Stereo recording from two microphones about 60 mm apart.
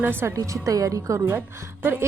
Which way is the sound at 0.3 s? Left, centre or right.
Right.